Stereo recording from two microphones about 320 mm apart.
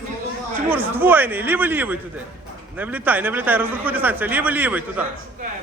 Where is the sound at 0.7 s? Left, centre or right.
Centre.